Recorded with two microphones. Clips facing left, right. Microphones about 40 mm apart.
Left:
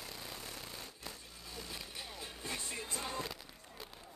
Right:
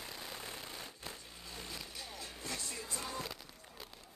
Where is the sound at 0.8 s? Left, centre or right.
Centre.